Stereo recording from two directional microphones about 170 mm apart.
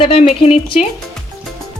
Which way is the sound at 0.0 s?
35° left (ahead or behind).